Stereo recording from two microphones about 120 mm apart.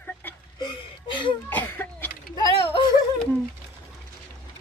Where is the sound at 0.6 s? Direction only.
40° left (ahead or behind).